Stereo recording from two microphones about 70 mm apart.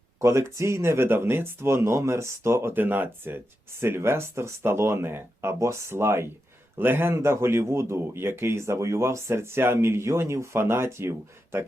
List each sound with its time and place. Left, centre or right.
0.2 s speech: right